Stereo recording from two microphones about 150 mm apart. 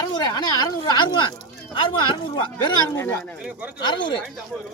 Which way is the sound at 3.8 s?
30° left (ahead or behind).